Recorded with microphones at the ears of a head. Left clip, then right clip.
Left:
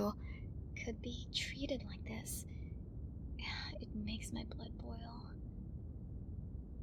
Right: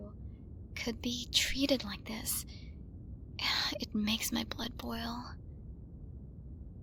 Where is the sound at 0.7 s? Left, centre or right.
Right.